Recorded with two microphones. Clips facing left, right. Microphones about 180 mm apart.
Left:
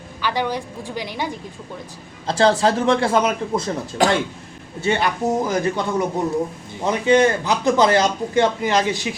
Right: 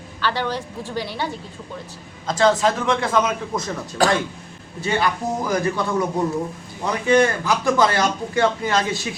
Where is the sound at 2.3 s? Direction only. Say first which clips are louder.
Left 1 dB; 30° left (ahead or behind).